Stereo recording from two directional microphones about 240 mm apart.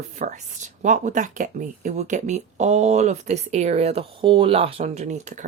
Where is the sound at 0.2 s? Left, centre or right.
Right.